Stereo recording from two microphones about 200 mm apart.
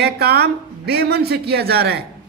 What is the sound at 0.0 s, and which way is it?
Speech, 50° right (ahead or behind).